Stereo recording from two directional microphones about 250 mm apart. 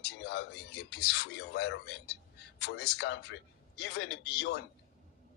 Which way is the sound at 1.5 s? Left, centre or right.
Left.